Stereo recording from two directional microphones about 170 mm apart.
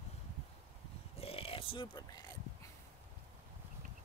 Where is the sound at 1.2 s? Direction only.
35° left (ahead or behind).